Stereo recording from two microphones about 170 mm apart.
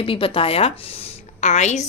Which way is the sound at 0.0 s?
30° left (ahead or behind).